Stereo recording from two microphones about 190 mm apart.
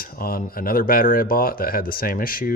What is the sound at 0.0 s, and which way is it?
Speech, 50° left (ahead or behind).